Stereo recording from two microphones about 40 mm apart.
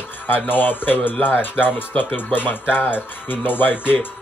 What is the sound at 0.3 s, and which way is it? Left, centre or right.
Speech, left.